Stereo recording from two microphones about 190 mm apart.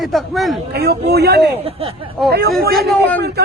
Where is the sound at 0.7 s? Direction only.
60° right (ahead or behind).